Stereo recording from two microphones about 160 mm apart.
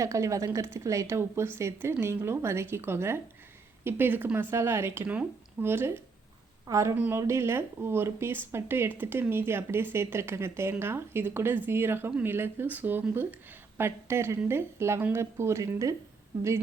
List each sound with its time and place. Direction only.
0.0 s speech: 20° right (ahead or behind)